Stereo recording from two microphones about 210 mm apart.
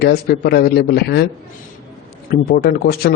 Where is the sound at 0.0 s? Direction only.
50° left (ahead or behind).